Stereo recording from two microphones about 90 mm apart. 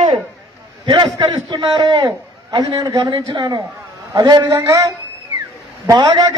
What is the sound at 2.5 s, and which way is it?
A man's voice, 45° right (ahead or behind).